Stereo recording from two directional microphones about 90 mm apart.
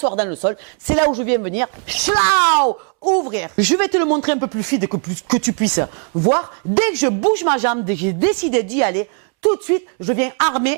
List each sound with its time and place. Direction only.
0.3 s a woman's voice: 15° right (ahead or behind)
1.9 s speech: centre (ahead or behind)
2.6 s a woman's voice: 25° right (ahead or behind)